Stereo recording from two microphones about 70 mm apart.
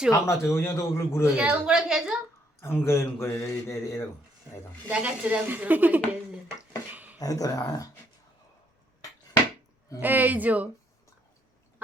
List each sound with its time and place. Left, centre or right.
0.1 s a man's voice: left
1.4 s a woman's voice: centre
2.6 s a man's voice: left
4.9 s a woman's voice: right
6.9 s a sound: right
7.2 s speech: left
10.0 s a woman's voice: right